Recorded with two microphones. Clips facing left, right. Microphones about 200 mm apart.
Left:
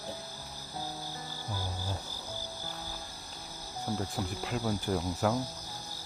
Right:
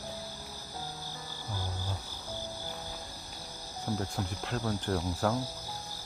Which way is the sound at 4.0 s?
5° left (ahead or behind).